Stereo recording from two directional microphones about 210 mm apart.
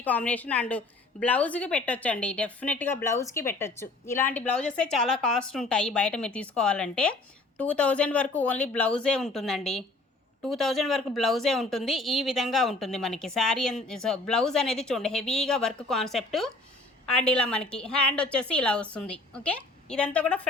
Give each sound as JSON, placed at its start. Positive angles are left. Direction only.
{"t": 0.0, "sound": "a woman's voice", "side_deg": 5}